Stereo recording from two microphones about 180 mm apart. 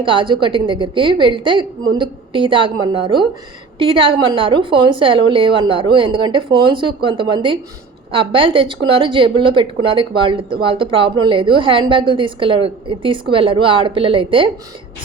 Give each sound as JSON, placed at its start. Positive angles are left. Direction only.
{"t": 0.0, "sound": "a woman's voice", "side_deg": -25}